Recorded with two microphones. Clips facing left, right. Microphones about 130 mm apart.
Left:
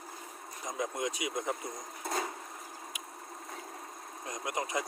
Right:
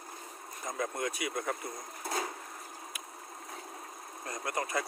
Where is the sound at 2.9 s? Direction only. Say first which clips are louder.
Even; 20° left (ahead or behind).